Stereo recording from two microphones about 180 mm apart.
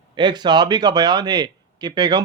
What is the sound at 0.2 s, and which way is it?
A man's voice, 25° right (ahead or behind).